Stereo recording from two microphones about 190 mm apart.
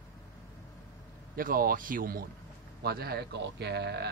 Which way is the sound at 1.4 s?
50° right (ahead or behind).